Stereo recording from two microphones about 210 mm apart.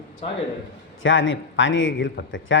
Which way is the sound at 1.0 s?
65° left (ahead or behind).